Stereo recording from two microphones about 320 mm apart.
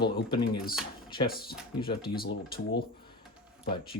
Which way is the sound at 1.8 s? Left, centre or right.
Left.